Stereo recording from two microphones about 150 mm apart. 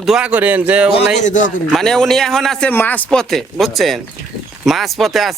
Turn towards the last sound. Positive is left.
turn(degrees=0)  # may be behind; listen again after turning